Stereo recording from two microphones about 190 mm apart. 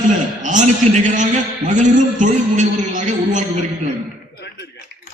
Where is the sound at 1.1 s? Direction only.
40° right (ahead or behind).